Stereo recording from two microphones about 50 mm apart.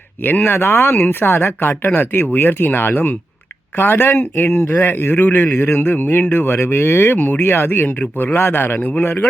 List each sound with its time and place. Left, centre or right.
0.3 s a man's voice: left